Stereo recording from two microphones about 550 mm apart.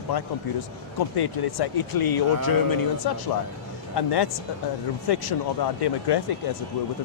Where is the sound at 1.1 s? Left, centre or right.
Left.